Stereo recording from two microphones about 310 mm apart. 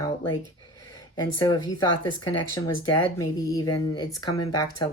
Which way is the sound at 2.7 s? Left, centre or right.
Left.